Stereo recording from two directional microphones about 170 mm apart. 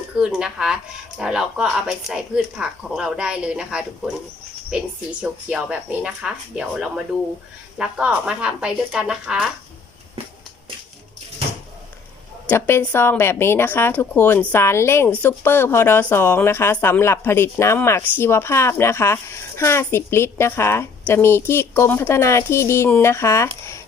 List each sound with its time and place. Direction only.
0.2 s speech: 5° right (ahead or behind)
12.5 s a woman's voice: 15° left (ahead or behind)